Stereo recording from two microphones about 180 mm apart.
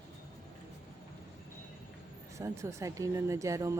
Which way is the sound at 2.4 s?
15° right (ahead or behind).